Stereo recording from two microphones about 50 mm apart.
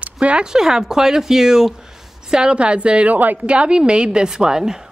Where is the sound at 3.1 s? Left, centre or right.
Right.